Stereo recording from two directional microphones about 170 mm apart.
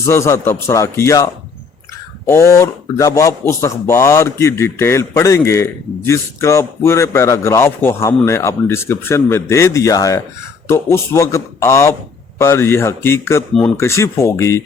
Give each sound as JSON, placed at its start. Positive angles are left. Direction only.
{"t": 0.0, "sound": "speech", "side_deg": 15}
{"t": 13.5, "sound": "speech", "side_deg": 5}
{"t": 13.7, "sound": "speech", "side_deg": 15}